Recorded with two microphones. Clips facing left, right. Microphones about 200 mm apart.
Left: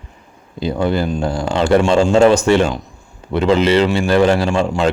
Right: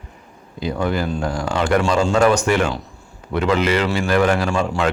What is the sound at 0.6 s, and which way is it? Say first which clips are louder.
A man's voice: left 4 dB; 30° left (ahead or behind).